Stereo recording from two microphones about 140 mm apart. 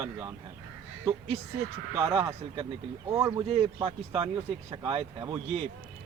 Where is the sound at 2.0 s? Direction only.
45° right (ahead or behind).